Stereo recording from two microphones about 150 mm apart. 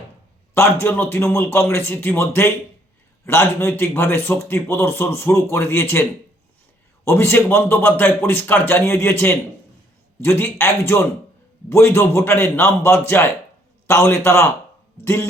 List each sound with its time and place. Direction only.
0.5 s a man's voice: 15° left (ahead or behind)